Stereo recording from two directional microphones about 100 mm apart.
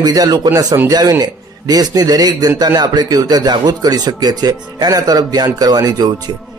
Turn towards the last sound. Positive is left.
turn(degrees=-40)  # may be behind; listen again after turning